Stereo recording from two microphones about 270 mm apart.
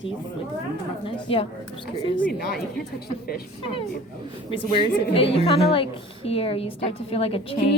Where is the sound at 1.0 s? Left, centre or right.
Left.